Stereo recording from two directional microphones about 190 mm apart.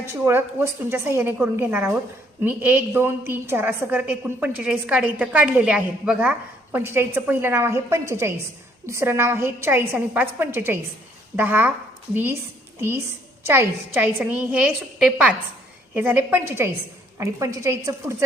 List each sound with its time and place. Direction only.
0.0 s a woman's voice: 15° right (ahead or behind)
13.4 s a woman's voice: 10° right (ahead or behind)